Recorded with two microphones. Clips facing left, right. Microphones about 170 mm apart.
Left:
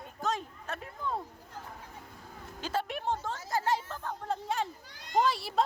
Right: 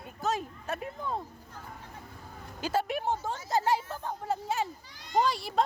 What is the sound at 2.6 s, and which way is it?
Speech, 10° right (ahead or behind).